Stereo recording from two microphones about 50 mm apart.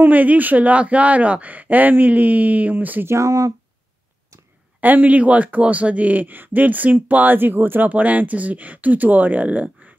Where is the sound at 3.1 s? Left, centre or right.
Right.